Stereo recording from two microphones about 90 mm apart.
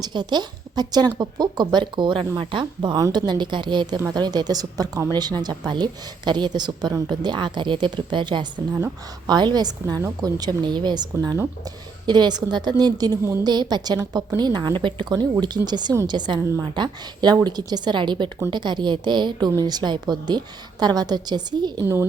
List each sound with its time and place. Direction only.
0.0 s a woman's voice: 55° right (ahead or behind)
12.0 s a woman's voice: 55° right (ahead or behind)
16.4 s a woman's voice: 35° right (ahead or behind)
16.7 s a woman's voice: 55° right (ahead or behind)